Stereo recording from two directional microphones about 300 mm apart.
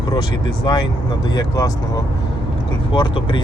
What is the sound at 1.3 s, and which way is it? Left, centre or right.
Speech, centre.